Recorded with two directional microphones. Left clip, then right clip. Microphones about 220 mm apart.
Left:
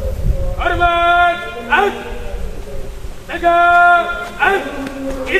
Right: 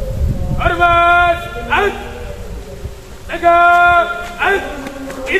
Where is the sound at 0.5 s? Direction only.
15° right (ahead or behind).